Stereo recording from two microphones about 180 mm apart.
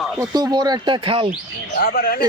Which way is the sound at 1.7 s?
55° left (ahead or behind).